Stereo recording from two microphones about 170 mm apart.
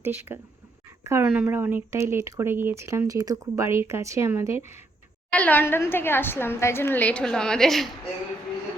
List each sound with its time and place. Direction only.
0.0 s speech: 10° right (ahead or behind)
5.3 s a woman's voice: 10° left (ahead or behind)